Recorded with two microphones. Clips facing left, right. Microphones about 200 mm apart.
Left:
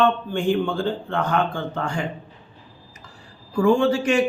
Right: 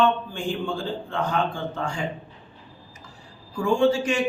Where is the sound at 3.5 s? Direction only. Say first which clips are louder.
Left 3 dB; 60° left (ahead or behind).